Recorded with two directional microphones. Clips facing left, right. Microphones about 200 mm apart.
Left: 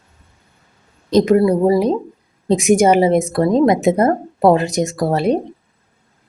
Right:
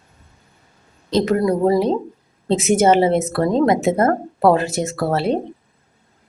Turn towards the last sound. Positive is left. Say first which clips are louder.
# left 3 dB
turn(degrees=15)  # may be behind; listen again after turning